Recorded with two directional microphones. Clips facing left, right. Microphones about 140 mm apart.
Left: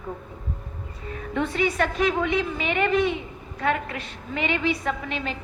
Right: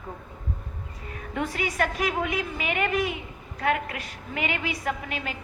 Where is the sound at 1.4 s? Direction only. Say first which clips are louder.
Left 3 dB; 25° left (ahead or behind).